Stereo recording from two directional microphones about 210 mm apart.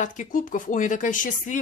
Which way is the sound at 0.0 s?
40° left (ahead or behind).